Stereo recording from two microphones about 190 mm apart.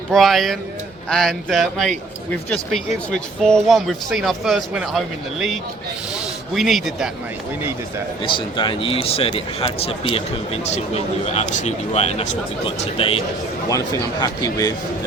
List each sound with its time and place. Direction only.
0.1 s speech: centre (ahead or behind)
3.1 s speech: 5° left (ahead or behind)
8.2 s speech: 25° left (ahead or behind)
13.7 s a man's voice: 15° left (ahead or behind)